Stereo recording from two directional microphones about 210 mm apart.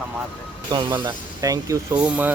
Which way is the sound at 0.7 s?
20° right (ahead or behind).